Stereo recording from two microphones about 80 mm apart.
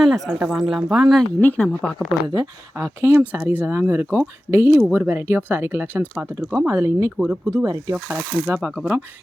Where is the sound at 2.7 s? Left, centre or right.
Right.